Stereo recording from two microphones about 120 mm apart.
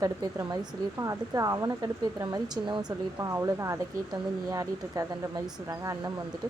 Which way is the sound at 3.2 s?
25° right (ahead or behind).